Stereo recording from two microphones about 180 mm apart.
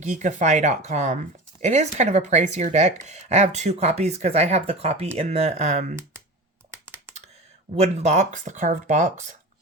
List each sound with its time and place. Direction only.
0.0 s speech: 40° right (ahead or behind)
7.8 s speech: 40° right (ahead or behind)